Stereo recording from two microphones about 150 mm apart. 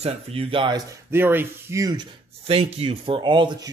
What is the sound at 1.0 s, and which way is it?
Speech, 15° right (ahead or behind).